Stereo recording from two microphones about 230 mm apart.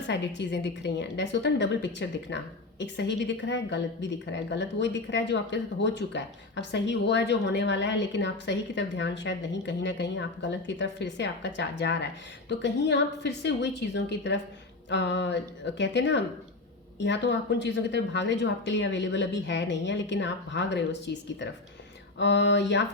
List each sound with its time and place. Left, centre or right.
0.1 s a woman's voice: left